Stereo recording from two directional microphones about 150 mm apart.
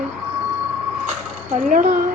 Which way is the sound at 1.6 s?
60° right (ahead or behind).